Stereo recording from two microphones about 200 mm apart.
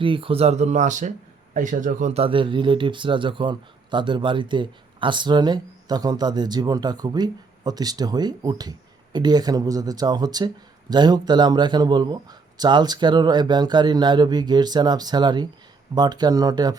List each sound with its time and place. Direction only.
0.0 s speech: 25° right (ahead or behind)